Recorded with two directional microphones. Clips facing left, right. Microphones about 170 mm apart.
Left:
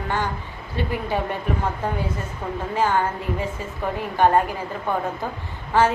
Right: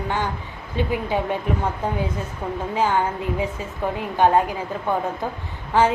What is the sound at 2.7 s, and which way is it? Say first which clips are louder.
Speech: even; 15° right (ahead or behind).